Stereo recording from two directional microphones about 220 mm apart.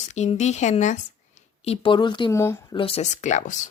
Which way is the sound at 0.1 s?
30° left (ahead or behind).